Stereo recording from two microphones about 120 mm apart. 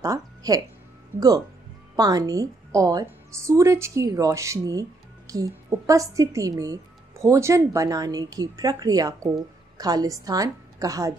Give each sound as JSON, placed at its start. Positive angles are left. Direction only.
{"t": 0.0, "sound": "music", "side_deg": -30}
{"t": 2.0, "sound": "a woman's voice", "side_deg": -30}